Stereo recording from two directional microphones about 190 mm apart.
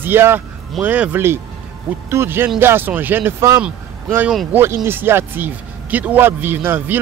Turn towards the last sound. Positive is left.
turn(degrees=-10)  # may be behind; listen again after turning